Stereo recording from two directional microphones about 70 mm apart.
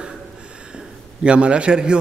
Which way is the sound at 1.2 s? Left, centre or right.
Centre.